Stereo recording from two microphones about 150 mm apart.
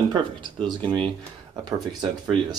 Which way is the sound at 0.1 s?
30° right (ahead or behind).